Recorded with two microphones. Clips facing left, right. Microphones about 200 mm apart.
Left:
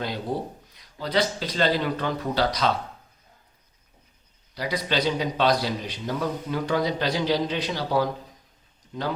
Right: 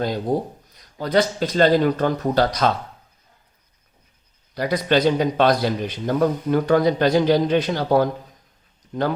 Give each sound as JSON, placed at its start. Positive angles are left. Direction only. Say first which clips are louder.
{"t": 0.0, "sound": "a man's voice", "louder": "right 7 dB", "side_deg": -45}
{"t": 4.5, "sound": "a man's voice", "louder": "right 7 dB", "side_deg": -50}